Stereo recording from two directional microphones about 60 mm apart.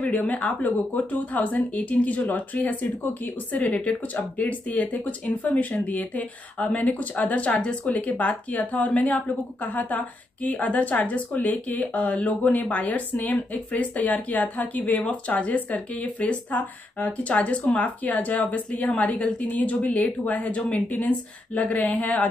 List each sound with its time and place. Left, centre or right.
0.1 s speech: left